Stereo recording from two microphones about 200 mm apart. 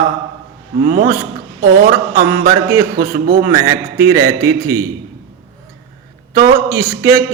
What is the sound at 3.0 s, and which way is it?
Speech, 50° right (ahead or behind).